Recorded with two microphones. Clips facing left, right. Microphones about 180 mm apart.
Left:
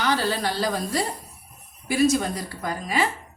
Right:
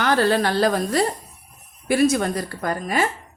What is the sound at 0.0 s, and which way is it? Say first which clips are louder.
A woman's voice: right 5 dB; 55° right (ahead or behind).